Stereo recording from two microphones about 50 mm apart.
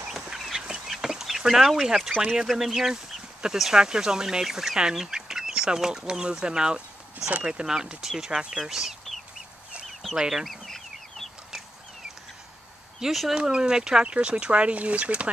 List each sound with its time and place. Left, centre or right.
0.3 s fowl: centre
0.8 s chicken: centre
2.0 s speech: centre
10.1 s speech: centre
10.4 s chicken: centre
13.0 s speech: centre
13.3 s speech: centre